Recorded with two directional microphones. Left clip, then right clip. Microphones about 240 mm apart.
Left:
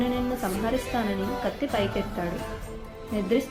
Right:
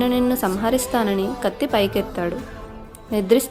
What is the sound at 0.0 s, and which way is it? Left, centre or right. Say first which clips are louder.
A woman's voice: right 8 dB; right.